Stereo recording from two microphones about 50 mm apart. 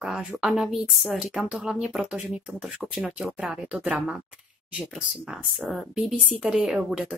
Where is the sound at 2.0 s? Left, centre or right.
Right.